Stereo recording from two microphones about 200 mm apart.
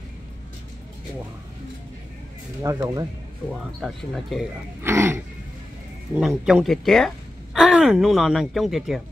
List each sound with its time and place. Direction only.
2.6 s speech: 20° right (ahead or behind)
3.8 s speech: centre (ahead or behind)
4.8 s throat clearing: 15° right (ahead or behind)
6.1 s speech: 5° right (ahead or behind)